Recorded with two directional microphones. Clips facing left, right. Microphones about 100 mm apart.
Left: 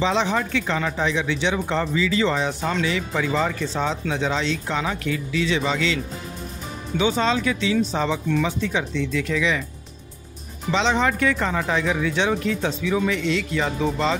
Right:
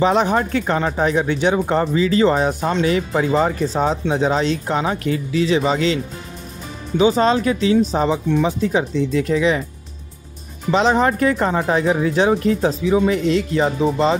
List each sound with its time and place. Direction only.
0.0 s speech: 50° right (ahead or behind)
7.0 s speech: 40° right (ahead or behind)
10.7 s speech: 45° right (ahead or behind)